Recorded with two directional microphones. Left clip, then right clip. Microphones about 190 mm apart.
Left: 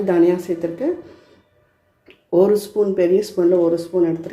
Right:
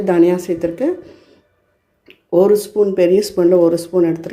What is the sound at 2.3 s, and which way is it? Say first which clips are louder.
Speech: right 3 dB; 20° right (ahead or behind).